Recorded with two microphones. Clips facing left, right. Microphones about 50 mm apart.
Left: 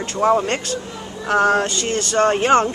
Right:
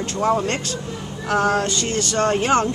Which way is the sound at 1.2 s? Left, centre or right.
Left.